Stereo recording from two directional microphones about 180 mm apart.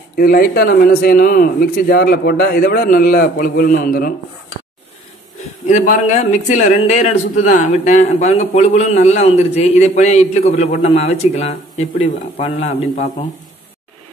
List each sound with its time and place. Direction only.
0.2 s speech: 55° left (ahead or behind)
5.7 s speech: 40° left (ahead or behind)